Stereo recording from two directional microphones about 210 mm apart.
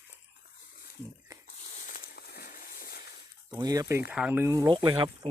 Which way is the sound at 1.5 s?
40° left (ahead or behind).